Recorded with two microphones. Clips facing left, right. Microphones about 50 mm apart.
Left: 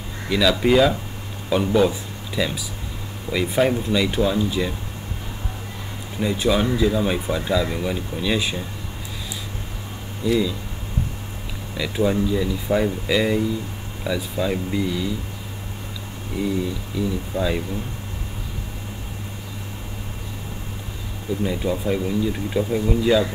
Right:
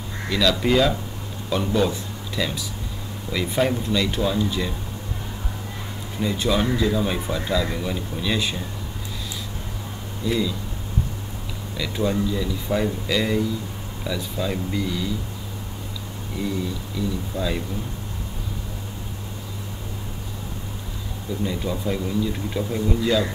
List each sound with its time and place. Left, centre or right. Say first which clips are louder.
0.3 s speech: left 3 dB; centre
6.1 s speech: left 2 dB; centre
10.2 s speech: left 3 dB; centre
11.7 s speech: left 3 dB; centre
16.3 s speech: left 3 dB; centre
17.3 s speech: left 4 dB; left
21.5 s speech: left 3 dB; centre